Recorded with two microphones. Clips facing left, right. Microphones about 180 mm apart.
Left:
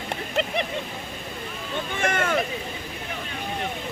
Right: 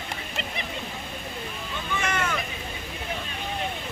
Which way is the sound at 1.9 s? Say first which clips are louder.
Left 4 dB; 50° left (ahead or behind).